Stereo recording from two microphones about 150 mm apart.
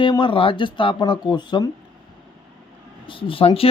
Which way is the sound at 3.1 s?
35° left (ahead or behind).